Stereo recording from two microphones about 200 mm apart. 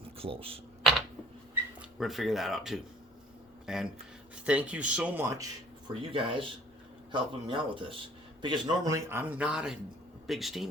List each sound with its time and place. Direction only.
0.2 s speech: 30° right (ahead or behind)
2.0 s a man's voice: centre (ahead or behind)
5.9 s a man's voice: 25° right (ahead or behind); by 10.7 s centre (ahead or behind)